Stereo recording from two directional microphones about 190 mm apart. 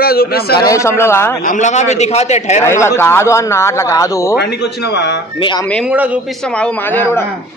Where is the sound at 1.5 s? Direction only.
40° left (ahead or behind).